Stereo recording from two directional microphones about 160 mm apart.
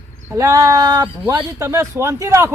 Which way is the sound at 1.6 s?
15° right (ahead or behind).